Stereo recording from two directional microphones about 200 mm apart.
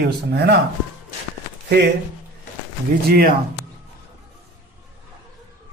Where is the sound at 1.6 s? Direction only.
55° right (ahead or behind).